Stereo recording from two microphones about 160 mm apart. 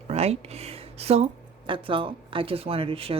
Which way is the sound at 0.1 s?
40° right (ahead or behind).